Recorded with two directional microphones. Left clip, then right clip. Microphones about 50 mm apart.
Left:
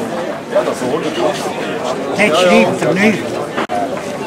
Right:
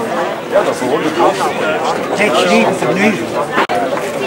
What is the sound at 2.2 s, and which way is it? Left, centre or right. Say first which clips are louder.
Speech: left 2 dB; centre.